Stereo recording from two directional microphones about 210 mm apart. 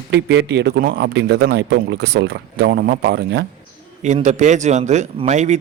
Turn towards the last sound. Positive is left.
turn(degrees=-35)  # may be behind; listen again after turning